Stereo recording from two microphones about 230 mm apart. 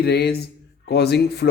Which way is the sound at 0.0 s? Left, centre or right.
Left.